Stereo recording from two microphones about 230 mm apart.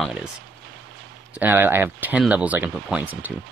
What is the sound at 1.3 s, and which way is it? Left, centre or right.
Speech, centre.